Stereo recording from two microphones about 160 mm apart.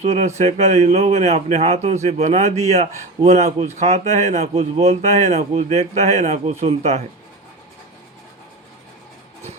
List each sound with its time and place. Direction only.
0.0 s speech: 45° right (ahead or behind)